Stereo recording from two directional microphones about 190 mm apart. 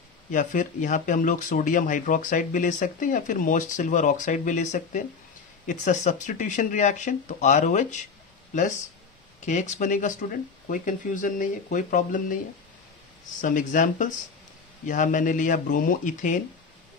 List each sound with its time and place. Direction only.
0.3 s speech: 40° left (ahead or behind)
9.4 s speech: 40° left (ahead or behind)
13.4 s speech: 40° left (ahead or behind)